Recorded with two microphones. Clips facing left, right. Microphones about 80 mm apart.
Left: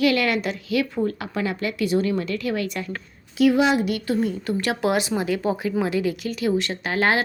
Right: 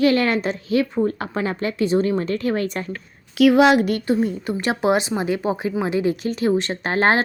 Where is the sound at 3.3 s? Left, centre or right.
Right.